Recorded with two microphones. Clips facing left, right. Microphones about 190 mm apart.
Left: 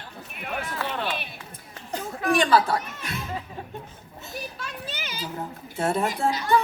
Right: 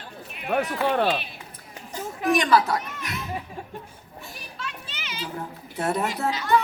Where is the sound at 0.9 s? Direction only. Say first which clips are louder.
Right 8 dB; 55° right (ahead or behind).